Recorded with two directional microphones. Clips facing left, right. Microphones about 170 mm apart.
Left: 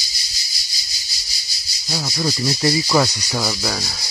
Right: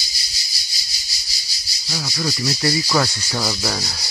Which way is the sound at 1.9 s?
45° left (ahead or behind).